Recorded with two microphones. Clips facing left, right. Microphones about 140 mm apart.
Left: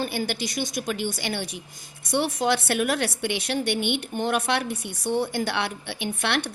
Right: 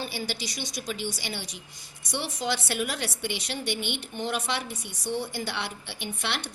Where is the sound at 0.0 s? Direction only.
55° left (ahead or behind).